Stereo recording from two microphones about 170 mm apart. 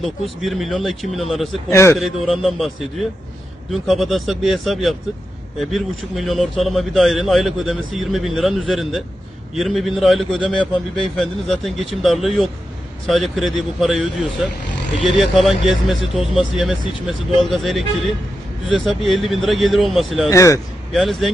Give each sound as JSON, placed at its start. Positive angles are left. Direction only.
{"t": 0.4, "sound": "a man's voice", "side_deg": 0}
{"t": 1.7, "sound": "a man's voice", "side_deg": 15}
{"t": 2.0, "sound": "a man's voice", "side_deg": 0}
{"t": 20.3, "sound": "a man's voice", "side_deg": 15}
{"t": 20.9, "sound": "a man's voice", "side_deg": 0}